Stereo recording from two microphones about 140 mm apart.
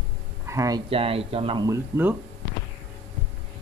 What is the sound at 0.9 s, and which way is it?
Speech, 40° right (ahead or behind).